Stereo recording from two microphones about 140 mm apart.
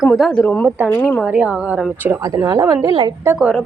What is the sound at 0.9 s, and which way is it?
Speech, 15° left (ahead or behind).